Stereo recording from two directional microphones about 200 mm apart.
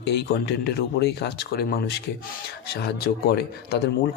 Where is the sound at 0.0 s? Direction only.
55° left (ahead or behind).